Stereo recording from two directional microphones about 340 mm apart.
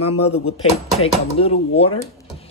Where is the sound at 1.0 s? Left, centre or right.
Centre.